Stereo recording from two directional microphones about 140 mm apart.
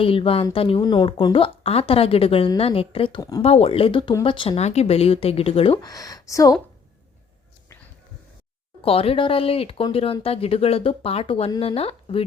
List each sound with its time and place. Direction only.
0.0 s speech: 40° left (ahead or behind)
3.2 s speech: 25° left (ahead or behind)
3.4 s speech: 45° left (ahead or behind)
5.8 s speech: 25° left (ahead or behind)
8.8 s speech: 45° left (ahead or behind)